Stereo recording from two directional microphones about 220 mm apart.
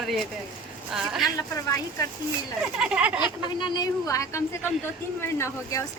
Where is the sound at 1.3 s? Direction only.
15° left (ahead or behind).